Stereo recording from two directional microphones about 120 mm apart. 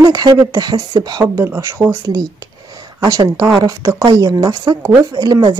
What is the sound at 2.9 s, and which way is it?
Speech, 30° right (ahead or behind).